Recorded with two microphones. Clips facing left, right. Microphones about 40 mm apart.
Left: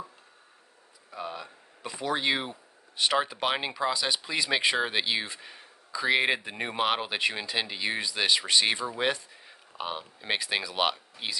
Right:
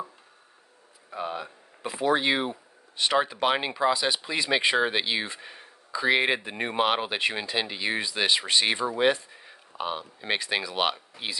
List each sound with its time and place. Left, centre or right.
1.1 s speech: centre
3.0 s speech: centre